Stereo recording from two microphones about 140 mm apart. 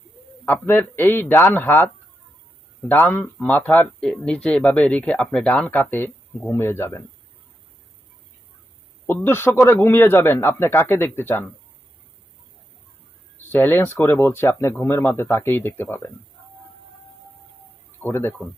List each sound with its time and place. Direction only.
0.4 s speech: 15° left (ahead or behind)
2.9 s speech: 15° left (ahead or behind)
9.0 s speech: 15° left (ahead or behind)
13.5 s speech: 15° left (ahead or behind)
18.0 s speech: 15° left (ahead or behind)